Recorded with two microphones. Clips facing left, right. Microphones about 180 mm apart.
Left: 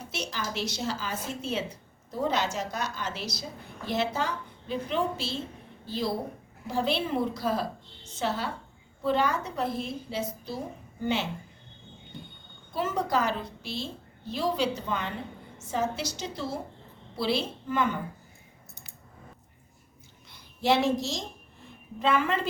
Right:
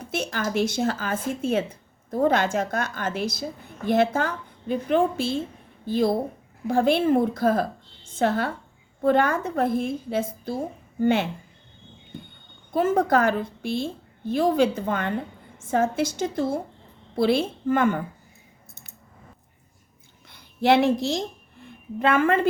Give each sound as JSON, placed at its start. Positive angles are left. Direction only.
{"t": 0.0, "sound": "speech", "side_deg": -50}
{"t": 12.1, "sound": "a sound", "side_deg": -50}
{"t": 12.7, "sound": "speech", "side_deg": -50}
{"t": 20.3, "sound": "a woman's voice", "side_deg": -60}